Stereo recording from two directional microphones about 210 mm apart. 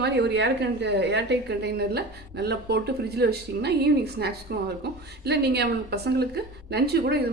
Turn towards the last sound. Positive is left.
turn(degrees=-50)  # may be behind; listen again after turning